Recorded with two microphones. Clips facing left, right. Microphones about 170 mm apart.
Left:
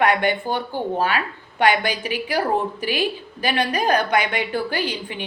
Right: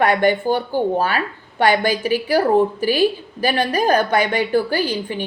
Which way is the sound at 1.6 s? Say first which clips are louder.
Right 3 dB; 40° right (ahead or behind).